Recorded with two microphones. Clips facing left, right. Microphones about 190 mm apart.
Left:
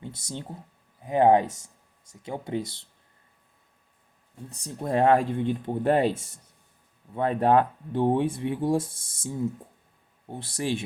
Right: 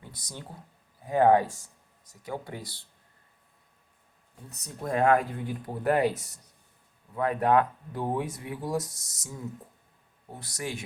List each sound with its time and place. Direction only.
0.0 s speech: 25° left (ahead or behind)
4.5 s speech: 30° left (ahead or behind)